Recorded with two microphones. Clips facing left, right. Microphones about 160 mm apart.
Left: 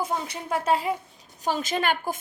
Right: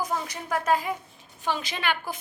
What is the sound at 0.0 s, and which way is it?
Speech, 25° left (ahead or behind).